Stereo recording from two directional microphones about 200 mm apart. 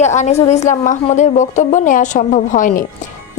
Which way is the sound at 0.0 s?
35° left (ahead or behind).